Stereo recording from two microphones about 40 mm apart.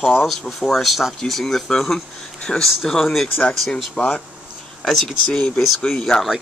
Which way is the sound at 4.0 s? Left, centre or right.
Left.